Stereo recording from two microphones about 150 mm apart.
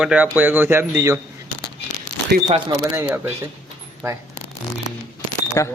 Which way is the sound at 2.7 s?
20° right (ahead or behind).